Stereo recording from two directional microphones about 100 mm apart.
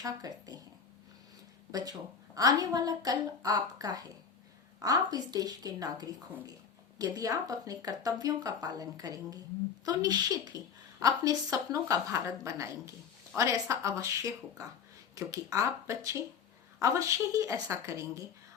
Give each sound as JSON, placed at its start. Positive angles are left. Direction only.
{"t": 0.0, "sound": "speech", "side_deg": -40}
{"t": 1.7, "sound": "speech", "side_deg": -40}